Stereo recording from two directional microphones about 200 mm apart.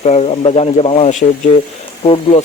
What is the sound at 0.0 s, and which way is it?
Speech, 30° left (ahead or behind).